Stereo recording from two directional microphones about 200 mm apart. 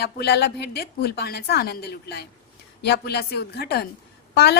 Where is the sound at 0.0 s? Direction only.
55° left (ahead or behind).